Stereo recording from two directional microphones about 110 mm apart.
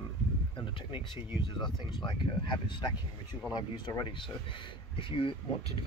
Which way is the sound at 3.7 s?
45° left (ahead or behind).